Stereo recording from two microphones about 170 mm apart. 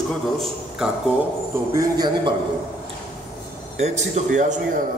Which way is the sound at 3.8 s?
40° right (ahead or behind).